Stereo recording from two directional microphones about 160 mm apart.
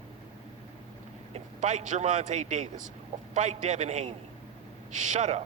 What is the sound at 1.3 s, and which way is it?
A man's voice, 45° right (ahead or behind).